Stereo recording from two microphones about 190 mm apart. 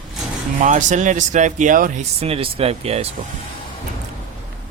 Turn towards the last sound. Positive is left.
turn(degrees=-30)  # may be behind; listen again after turning